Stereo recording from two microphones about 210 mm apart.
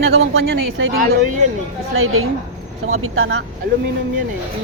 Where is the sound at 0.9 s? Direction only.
50° right (ahead or behind).